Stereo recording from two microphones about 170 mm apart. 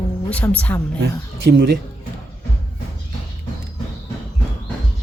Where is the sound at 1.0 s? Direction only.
85° right.